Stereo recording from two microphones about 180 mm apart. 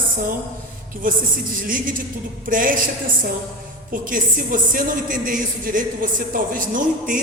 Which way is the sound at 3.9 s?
50° right (ahead or behind).